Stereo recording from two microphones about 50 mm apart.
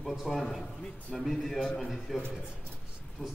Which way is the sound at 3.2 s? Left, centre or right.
Right.